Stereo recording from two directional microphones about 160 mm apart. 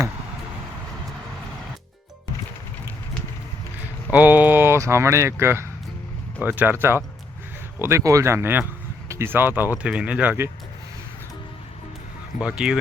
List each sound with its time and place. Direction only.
4.1 s speech: 10° right (ahead or behind)
12.4 s speech: 5° right (ahead or behind)